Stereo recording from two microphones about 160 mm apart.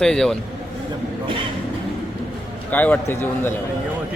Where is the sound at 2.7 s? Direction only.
10° left (ahead or behind).